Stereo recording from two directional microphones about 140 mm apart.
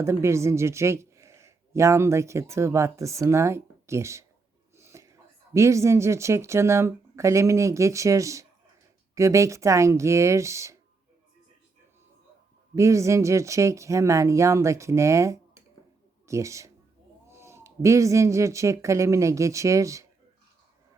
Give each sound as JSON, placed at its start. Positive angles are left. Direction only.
{"t": 0.0, "sound": "a woman's voice", "side_deg": -20}
{"t": 12.7, "sound": "speech", "side_deg": -20}